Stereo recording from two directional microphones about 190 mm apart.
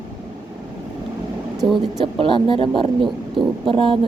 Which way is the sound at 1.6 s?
25° right (ahead or behind).